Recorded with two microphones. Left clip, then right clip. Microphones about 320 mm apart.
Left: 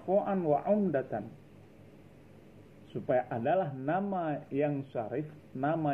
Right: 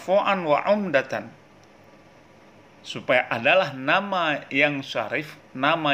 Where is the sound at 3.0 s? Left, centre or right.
Right.